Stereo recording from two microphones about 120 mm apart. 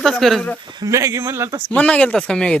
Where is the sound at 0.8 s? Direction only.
25° right (ahead or behind).